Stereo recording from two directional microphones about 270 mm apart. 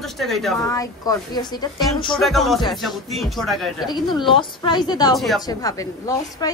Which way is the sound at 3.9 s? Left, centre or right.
Centre.